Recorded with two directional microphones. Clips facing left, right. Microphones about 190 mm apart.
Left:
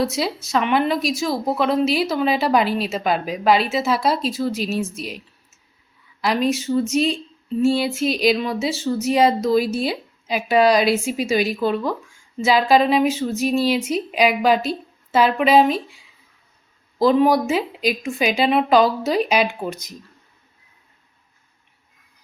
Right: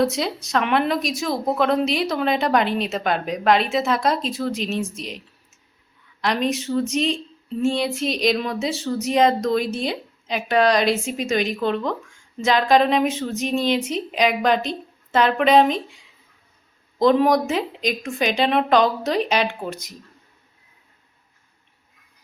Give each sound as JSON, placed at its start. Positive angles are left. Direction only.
{"t": 0.0, "sound": "speech", "side_deg": 5}
{"t": 6.2, "sound": "a woman's voice", "side_deg": 5}
{"t": 17.0, "sound": "a woman's voice", "side_deg": 5}